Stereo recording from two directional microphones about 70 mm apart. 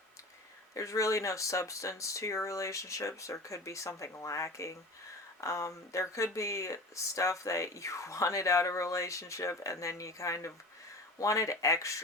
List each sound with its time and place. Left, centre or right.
0.7 s speech: left